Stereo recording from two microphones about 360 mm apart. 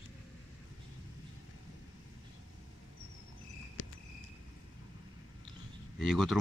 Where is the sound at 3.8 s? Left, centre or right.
Left.